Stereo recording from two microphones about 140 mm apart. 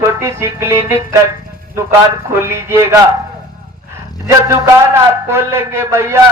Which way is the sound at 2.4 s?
20° right (ahead or behind).